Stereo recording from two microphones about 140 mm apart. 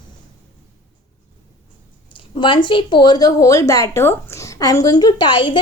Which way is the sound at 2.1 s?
35° left (ahead or behind).